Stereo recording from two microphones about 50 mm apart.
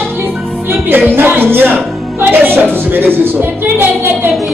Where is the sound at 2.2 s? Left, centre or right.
Right.